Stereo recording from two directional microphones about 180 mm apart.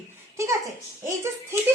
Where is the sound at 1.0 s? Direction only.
15° right (ahead or behind).